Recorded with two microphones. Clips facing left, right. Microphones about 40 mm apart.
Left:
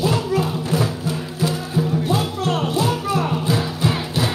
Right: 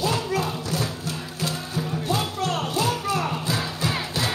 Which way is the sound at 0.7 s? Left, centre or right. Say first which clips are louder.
Left 6 dB; left.